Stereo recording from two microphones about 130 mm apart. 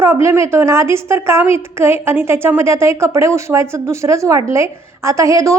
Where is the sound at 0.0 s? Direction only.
20° right (ahead or behind).